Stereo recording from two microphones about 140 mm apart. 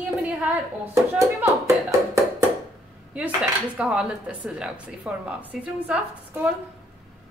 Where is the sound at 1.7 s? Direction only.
20° right (ahead or behind).